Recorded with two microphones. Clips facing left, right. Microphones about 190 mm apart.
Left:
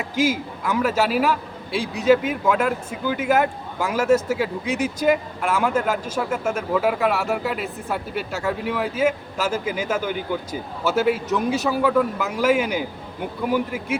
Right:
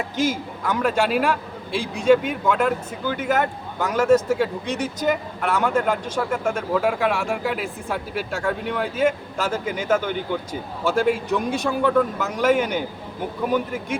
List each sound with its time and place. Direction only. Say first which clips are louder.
0.2 s a man's voice: left 2 dB; 10° left (ahead or behind)